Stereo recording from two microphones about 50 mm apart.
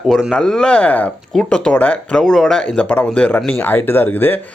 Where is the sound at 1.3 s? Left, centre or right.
Centre.